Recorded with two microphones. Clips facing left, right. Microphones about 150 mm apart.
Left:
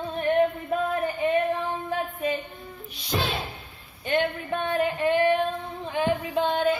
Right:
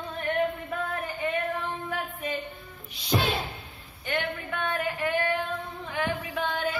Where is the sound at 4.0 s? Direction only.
25° left (ahead or behind).